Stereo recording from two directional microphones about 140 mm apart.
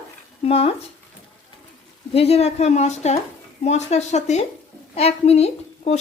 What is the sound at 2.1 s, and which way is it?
A woman's voice, 45° left (ahead or behind).